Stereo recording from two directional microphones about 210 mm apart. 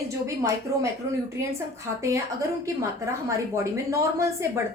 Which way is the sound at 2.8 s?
15° right (ahead or behind).